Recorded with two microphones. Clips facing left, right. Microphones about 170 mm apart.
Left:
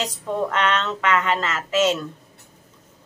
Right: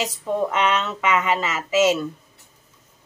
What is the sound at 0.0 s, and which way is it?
A woman's voice, 10° right (ahead or behind).